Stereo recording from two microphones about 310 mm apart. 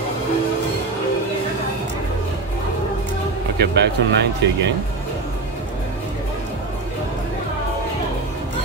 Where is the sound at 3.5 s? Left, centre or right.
Right.